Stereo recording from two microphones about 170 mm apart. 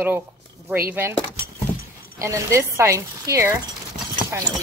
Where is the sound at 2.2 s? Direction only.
15° right (ahead or behind).